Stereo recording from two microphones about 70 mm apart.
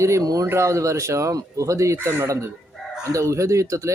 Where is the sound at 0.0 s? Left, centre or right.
Right.